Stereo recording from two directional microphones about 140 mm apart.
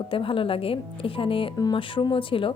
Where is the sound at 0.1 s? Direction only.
40° left (ahead or behind).